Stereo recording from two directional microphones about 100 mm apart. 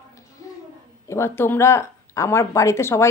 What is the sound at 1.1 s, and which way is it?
Speech, 25° left (ahead or behind).